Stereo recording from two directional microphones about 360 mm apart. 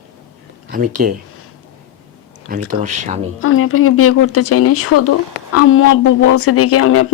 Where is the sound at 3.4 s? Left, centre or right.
Left.